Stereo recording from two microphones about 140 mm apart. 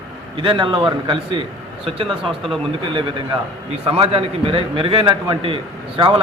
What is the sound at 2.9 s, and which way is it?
A man's voice, 35° right (ahead or behind).